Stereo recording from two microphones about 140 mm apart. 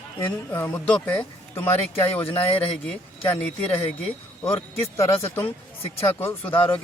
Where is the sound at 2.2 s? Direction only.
40° left (ahead or behind).